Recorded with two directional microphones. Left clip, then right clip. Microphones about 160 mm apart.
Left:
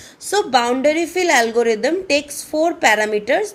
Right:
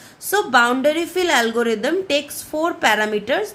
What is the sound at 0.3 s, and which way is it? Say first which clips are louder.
A woman's voice: right 1 dB; 25° left (ahead or behind).